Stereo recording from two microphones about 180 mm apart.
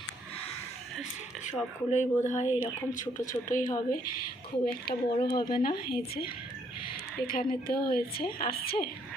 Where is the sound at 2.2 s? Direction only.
40° left (ahead or behind).